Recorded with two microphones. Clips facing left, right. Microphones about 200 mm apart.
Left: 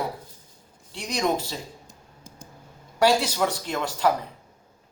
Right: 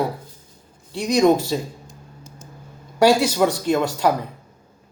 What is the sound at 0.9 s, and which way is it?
Speech, 10° right (ahead or behind).